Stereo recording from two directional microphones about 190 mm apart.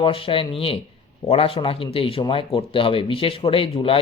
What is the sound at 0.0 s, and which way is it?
Speech, 30° left (ahead or behind).